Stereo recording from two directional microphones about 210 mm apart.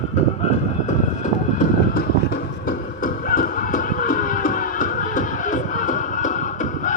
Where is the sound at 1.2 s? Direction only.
40° left (ahead or behind).